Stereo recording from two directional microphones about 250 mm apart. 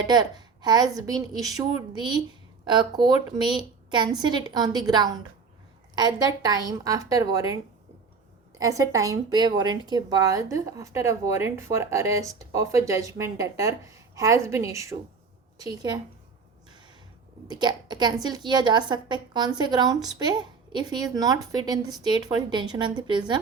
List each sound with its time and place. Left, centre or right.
0.1 s a woman's voice: centre
17.5 s a woman's voice: centre